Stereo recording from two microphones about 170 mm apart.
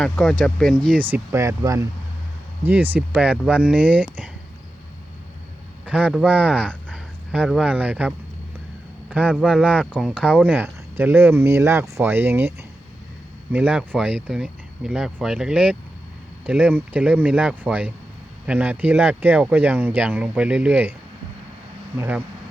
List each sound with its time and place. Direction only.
0.0 s speech: 5° left (ahead or behind)
0.9 s speech: 10° right (ahead or behind)
5.8 s speech: 5° right (ahead or behind)
21.9 s speech: 10° right (ahead or behind)